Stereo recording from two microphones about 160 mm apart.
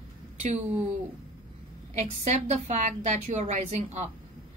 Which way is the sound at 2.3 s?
45° right (ahead or behind).